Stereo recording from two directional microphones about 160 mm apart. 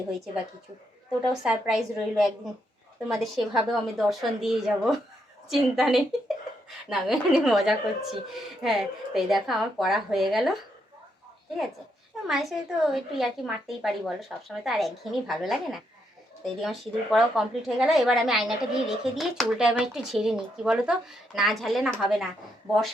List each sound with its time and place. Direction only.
1.5 s speech: 5° right (ahead or behind)
12.3 s speech: centre (ahead or behind)